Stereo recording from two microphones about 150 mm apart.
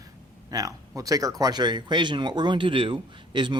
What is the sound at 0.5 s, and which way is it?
Speech, 25° right (ahead or behind).